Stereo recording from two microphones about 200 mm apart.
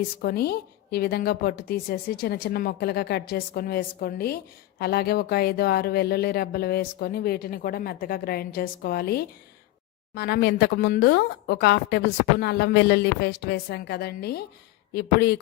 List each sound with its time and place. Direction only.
0.2 s speech: 55° left (ahead or behind)